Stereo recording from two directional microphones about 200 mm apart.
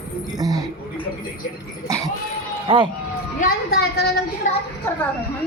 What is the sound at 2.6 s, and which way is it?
Speech, 25° right (ahead or behind).